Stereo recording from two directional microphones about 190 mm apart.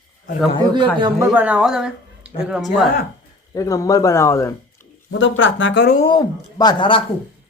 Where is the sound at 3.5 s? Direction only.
15° left (ahead or behind).